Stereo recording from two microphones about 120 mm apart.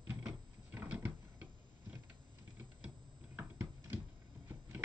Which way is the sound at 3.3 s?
15° right (ahead or behind).